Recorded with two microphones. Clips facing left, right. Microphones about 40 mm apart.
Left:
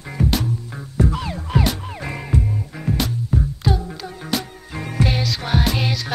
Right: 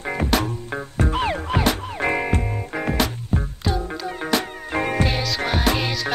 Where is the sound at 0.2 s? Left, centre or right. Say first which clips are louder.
Left 2 dB; right.